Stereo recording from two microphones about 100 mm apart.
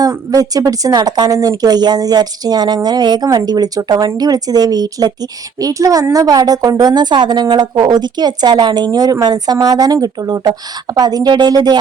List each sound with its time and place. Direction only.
0.0 s a woman's voice: 35° right (ahead or behind)